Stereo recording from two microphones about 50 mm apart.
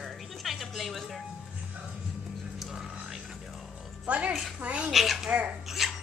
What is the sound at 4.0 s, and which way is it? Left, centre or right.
Music, right.